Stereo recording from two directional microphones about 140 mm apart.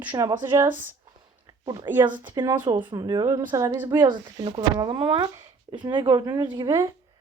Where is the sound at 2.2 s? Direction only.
30° right (ahead or behind).